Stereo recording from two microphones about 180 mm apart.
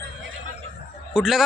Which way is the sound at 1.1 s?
Centre (ahead or behind).